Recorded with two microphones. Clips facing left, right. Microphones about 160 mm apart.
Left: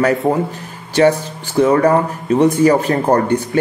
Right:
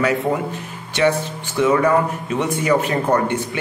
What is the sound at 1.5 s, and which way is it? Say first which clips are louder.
Speech: left 4 dB; 40° left (ahead or behind).